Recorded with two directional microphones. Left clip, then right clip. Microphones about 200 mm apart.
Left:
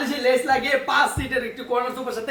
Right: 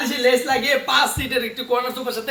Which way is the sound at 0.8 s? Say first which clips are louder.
Right 2 dB; 25° right (ahead or behind).